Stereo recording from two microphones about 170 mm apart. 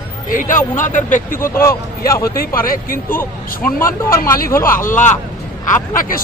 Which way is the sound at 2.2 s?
60° left (ahead or behind).